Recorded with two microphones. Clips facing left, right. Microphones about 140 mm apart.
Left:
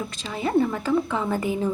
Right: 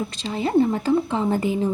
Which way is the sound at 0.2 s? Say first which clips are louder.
Right 3 dB; 30° right (ahead or behind).